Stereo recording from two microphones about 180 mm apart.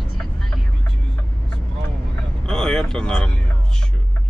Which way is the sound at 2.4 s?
5° left (ahead or behind).